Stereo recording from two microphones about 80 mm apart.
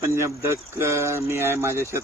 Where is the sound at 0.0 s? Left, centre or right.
Right.